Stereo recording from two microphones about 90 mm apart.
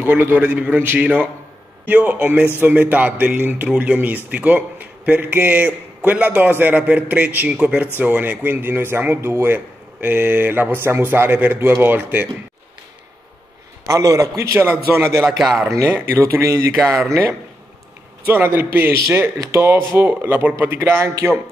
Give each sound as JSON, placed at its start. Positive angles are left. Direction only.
{"t": 0.1, "sound": "speech", "side_deg": -20}
{"t": 13.8, "sound": "a man's voice", "side_deg": -35}
{"t": 15.2, "sound": "a man's voice", "side_deg": 0}
{"t": 16.3, "sound": "a man's voice", "side_deg": -35}